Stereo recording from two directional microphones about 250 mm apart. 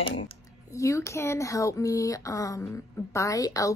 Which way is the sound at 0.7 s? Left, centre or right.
Centre.